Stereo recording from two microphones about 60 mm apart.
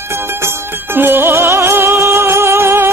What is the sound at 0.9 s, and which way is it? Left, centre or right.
Music, right.